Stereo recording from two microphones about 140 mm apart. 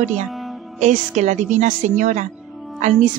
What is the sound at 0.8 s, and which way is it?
A woman's voice, 60° right (ahead or behind).